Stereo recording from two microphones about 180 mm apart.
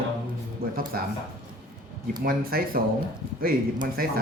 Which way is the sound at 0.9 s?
55° right (ahead or behind).